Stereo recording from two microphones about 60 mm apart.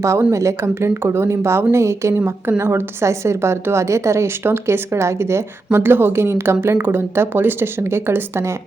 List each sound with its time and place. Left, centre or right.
0.3 s speech: right
0.7 s a woman's voice: right
5.7 s a woman's voice: right